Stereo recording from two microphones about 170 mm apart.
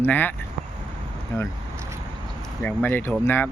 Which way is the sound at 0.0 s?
10° left (ahead or behind).